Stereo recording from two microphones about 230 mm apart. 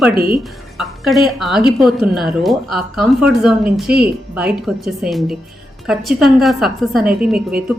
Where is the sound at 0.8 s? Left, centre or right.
Centre.